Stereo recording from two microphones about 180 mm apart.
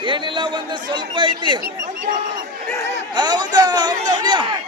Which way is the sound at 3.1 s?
25° right (ahead or behind).